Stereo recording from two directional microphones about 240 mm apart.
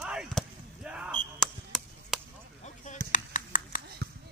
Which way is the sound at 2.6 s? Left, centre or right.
Left.